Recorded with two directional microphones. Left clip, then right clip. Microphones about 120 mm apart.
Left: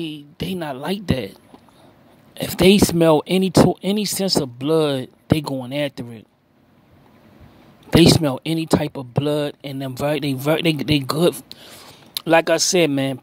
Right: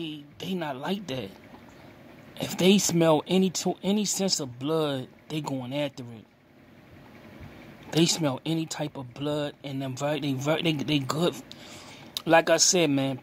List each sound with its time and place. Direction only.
0.0 s speech: 35° left (ahead or behind)
2.3 s speech: 35° left (ahead or behind)
7.9 s speech: 40° left (ahead or behind)